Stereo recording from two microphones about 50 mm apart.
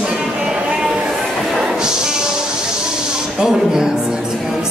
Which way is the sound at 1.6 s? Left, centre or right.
Centre.